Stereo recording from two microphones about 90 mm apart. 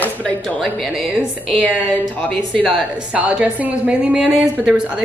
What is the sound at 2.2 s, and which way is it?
Speech, 10° left (ahead or behind).